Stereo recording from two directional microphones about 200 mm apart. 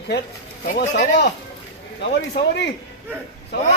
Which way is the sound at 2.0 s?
60° left (ahead or behind).